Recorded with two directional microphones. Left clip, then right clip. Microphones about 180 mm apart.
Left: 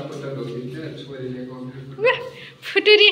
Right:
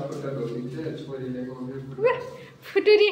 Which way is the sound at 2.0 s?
Centre (ahead or behind).